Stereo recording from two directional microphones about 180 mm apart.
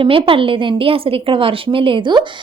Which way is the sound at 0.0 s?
30° right (ahead or behind).